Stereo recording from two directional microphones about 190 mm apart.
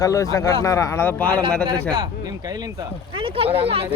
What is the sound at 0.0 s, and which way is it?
Speech, 15° left (ahead or behind).